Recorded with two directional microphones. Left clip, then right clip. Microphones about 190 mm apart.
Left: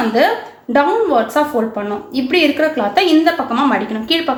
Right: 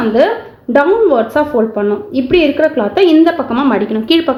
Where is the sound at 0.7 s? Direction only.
40° right (ahead or behind).